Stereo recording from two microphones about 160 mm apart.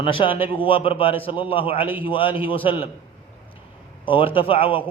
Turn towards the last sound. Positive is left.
turn(degrees=35)  # may be behind; listen again after turning